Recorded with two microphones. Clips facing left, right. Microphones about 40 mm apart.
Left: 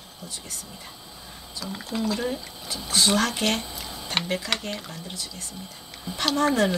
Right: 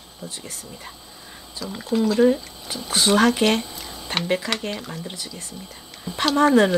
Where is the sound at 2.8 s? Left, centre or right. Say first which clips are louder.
Right 5 dB; centre.